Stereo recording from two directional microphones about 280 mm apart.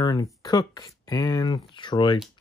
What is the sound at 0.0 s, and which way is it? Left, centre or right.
Speech, centre.